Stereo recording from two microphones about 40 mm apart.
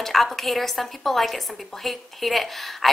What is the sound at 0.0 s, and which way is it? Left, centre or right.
A woman's voice, centre.